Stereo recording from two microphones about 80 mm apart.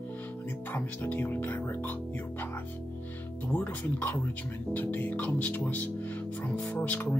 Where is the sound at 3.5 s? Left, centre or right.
Left.